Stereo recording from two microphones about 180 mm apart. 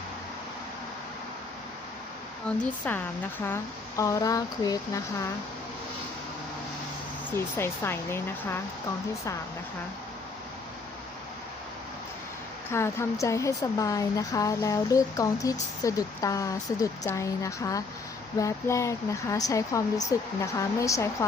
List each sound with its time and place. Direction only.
2.5 s speech: 5° left (ahead or behind)
7.3 s speech: 15° left (ahead or behind)
12.7 s speech: 15° left (ahead or behind)